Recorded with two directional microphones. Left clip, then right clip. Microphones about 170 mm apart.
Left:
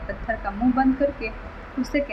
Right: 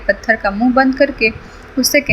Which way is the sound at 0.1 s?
35° right (ahead or behind).